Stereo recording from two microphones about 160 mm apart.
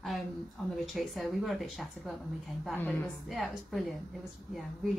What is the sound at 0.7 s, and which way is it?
A woman's voice, centre (ahead or behind).